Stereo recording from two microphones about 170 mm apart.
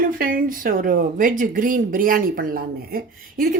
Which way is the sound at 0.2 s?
55° right (ahead or behind).